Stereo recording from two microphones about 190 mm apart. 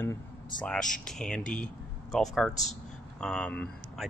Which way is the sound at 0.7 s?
5° left (ahead or behind).